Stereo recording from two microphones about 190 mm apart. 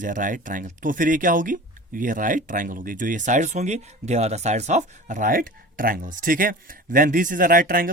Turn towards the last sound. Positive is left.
turn(degrees=-45)  # may be behind; listen again after turning